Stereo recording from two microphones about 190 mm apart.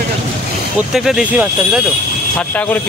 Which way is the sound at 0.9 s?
5° right (ahead or behind).